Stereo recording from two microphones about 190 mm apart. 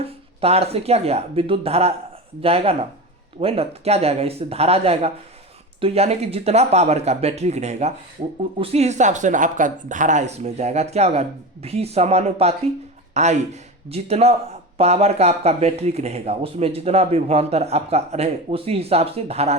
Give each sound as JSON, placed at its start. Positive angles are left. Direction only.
{"t": 0.0, "sound": "speech", "side_deg": -30}